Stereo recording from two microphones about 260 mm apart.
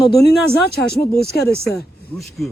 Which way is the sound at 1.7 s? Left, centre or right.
Centre.